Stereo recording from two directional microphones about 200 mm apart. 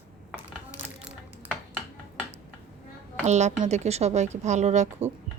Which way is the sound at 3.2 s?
35° right (ahead or behind).